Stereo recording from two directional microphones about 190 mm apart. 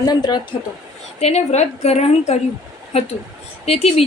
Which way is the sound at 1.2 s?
35° left (ahead or behind).